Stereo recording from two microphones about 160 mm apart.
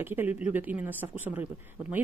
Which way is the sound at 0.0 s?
15° right (ahead or behind).